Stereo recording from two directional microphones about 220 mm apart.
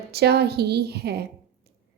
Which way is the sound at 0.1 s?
45° right (ahead or behind).